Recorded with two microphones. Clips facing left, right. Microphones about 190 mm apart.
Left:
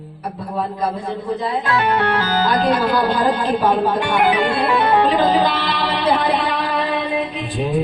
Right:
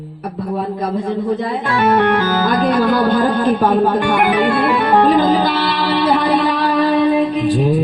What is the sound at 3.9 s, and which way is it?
Music, 50° right (ahead or behind).